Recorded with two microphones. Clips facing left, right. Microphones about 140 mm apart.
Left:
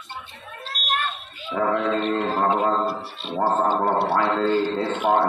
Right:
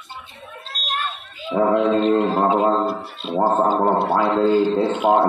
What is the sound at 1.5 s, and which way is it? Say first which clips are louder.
Mantra: right 5 dB; 25° right (ahead or behind).